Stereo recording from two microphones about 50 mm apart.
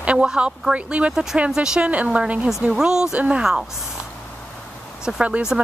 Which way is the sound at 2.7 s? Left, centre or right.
Centre.